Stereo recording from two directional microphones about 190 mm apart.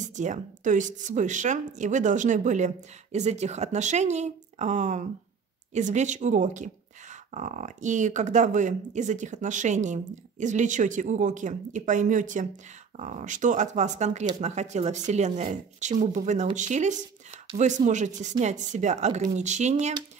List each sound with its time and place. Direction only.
0.0 s speech: 40° right (ahead or behind)